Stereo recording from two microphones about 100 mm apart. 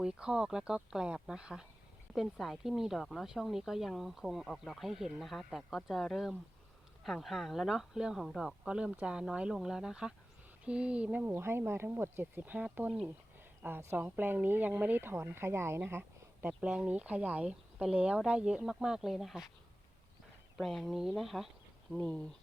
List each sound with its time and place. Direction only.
0.0 s speech: 10° right (ahead or behind)
20.6 s speech: centre (ahead or behind)